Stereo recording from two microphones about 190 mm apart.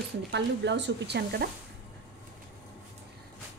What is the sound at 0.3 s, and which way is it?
Speech, 65° right (ahead or behind).